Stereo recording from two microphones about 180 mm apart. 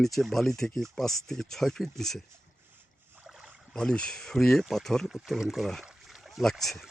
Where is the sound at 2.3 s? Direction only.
10° right (ahead or behind).